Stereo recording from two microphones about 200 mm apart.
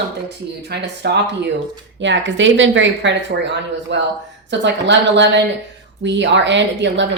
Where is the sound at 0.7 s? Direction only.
55° right (ahead or behind).